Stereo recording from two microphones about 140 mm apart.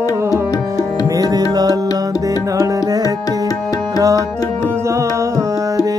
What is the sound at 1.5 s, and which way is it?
Music, 30° right (ahead or behind).